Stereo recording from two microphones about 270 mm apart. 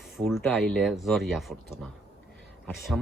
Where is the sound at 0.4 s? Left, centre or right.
Centre.